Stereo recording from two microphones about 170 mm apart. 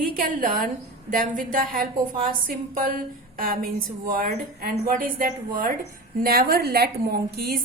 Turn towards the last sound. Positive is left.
turn(degrees=-65)  # may be behind; listen again after turning